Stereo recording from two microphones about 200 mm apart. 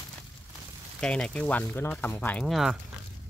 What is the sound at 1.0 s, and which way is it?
Speech, 5° left (ahead or behind).